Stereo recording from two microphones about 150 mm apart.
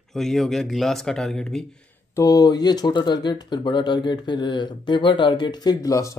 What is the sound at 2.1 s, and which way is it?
Speech, 25° left (ahead or behind).